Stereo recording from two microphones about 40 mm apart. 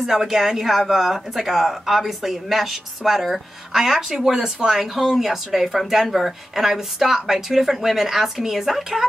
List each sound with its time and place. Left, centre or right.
0.0 s speech: centre
4.4 s speech: centre
4.7 s speech: centre